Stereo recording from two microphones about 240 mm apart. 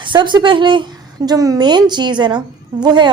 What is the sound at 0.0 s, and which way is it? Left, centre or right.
A woman's voice, centre.